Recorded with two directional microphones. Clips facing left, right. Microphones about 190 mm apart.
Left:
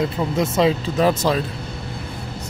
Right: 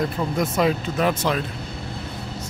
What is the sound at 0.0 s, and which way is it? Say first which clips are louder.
Speech: left 2 dB; 25° left (ahead or behind).